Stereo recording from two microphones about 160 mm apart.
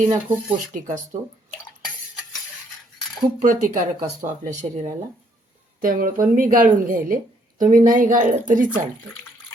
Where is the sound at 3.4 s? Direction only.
55° right (ahead or behind).